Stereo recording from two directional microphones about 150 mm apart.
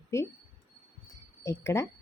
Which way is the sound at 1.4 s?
20° left (ahead or behind).